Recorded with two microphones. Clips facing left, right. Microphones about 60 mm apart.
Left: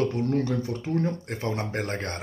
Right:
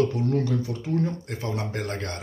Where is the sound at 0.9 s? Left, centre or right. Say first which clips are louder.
Right 1 dB; left.